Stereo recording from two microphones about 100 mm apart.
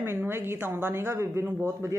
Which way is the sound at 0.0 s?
25° right (ahead or behind).